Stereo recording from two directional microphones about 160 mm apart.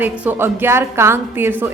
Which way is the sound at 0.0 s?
10° right (ahead or behind).